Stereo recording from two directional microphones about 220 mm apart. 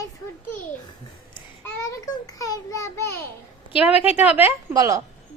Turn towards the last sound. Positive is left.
turn(degrees=-15)  # may be behind; listen again after turning